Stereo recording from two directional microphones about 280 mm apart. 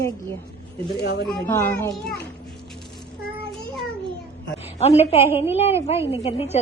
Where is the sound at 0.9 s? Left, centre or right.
Left.